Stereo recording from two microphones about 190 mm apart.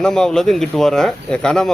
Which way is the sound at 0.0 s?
5° left (ahead or behind).